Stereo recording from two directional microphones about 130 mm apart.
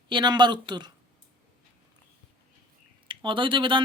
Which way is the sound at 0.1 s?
35° right (ahead or behind).